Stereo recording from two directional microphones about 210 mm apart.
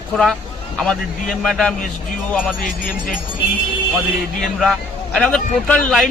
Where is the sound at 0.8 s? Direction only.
Centre (ahead or behind).